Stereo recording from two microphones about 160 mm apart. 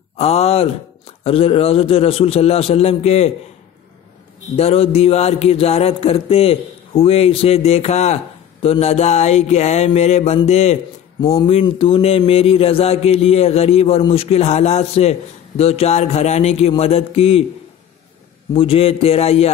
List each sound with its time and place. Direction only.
0.2 s speech: 40° left (ahead or behind)
4.6 s speech: 40° left (ahead or behind)
8.6 s a sound: 40° left (ahead or behind)
11.1 s speech: 20° left (ahead or behind)
11.6 s speech: 35° left (ahead or behind)
18.5 s speech: 35° left (ahead or behind)